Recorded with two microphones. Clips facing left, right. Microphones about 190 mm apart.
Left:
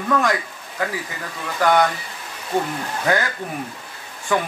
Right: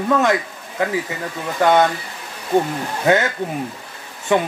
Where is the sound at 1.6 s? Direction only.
20° right (ahead or behind).